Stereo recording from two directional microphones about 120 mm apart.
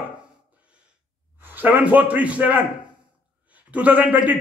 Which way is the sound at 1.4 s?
15° right (ahead or behind).